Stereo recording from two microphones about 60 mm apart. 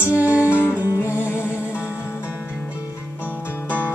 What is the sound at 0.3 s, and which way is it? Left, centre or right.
Music, left.